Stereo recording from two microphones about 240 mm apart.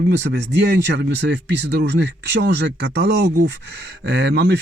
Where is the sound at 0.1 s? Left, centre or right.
Right.